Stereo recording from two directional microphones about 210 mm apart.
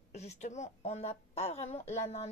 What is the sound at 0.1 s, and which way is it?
A woman's voice, 30° left (ahead or behind).